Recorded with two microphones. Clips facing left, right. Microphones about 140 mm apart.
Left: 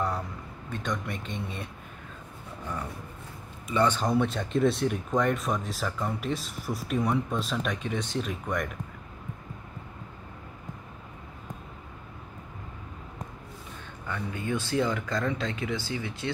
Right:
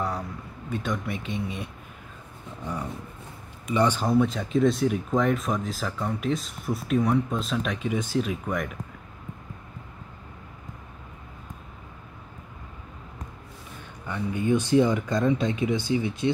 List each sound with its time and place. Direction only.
0.7 s speech: 5° right (ahead or behind)
14.0 s speech: 20° right (ahead or behind)